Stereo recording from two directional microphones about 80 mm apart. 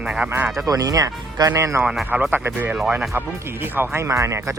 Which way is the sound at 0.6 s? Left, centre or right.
Right.